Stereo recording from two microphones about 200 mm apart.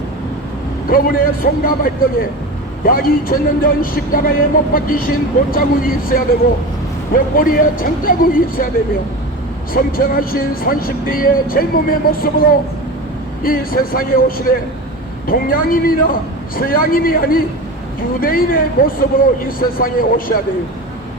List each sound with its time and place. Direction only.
0.9 s speech: 45° left (ahead or behind)
9.7 s speech: 45° left (ahead or behind)